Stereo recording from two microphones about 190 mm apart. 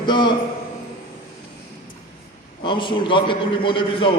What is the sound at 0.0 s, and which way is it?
Speech, 25° left (ahead or behind).